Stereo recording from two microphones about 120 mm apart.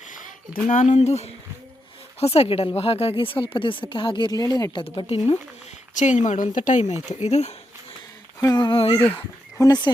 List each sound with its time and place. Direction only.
0.7 s a woman's voice: 85° left; by 4.9 s 40° left (ahead or behind)
5.0 s speech: 60° left (ahead or behind)
5.9 s speech: 90° left
7.1 s speech: 70° left (ahead or behind)
8.5 s a woman's voice: 45° left (ahead or behind)
9.0 s speech: 10° left (ahead or behind)
9.6 s speech: 35° left (ahead or behind)